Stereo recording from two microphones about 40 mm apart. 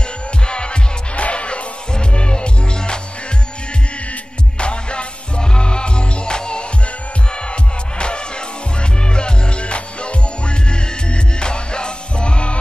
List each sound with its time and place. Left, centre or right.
0.5 s music: left
4.1 s music: left
8.0 s music: left